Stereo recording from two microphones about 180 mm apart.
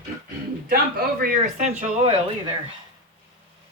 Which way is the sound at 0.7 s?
55° right (ahead or behind).